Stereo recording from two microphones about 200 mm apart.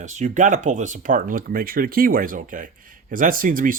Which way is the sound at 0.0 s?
40° right (ahead or behind).